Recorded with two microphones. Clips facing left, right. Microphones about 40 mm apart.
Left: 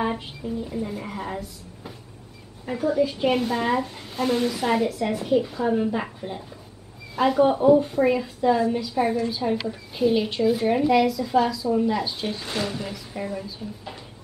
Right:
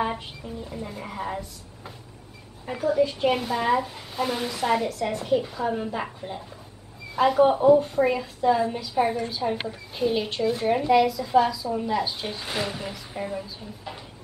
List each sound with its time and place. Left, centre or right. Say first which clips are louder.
0.0 s a woman's voice: left 1 dB; centre